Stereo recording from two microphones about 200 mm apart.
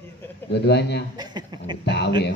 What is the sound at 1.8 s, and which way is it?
Speech, 55° left (ahead or behind).